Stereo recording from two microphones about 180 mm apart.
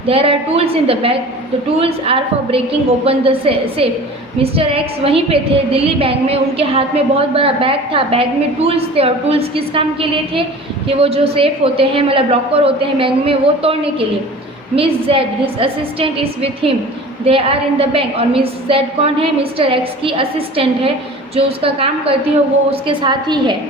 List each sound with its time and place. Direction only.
0.1 s a woman's voice: 30° right (ahead or behind)